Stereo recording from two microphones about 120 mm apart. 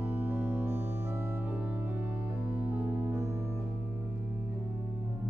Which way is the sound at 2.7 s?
25° right (ahead or behind).